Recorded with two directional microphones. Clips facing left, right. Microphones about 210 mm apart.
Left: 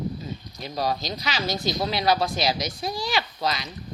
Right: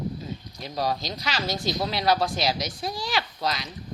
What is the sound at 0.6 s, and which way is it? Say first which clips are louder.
Speech: left 1 dB; centre (ahead or behind).